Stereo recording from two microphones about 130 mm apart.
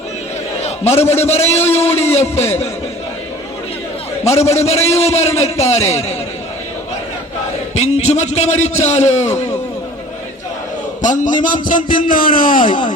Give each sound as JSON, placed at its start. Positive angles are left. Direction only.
{"t": 0.6, "sound": "a man's voice", "side_deg": 55}
{"t": 4.3, "sound": "a man's voice", "side_deg": 55}
{"t": 7.8, "sound": "a man's voice", "side_deg": 55}
{"t": 11.0, "sound": "a man's voice", "side_deg": 80}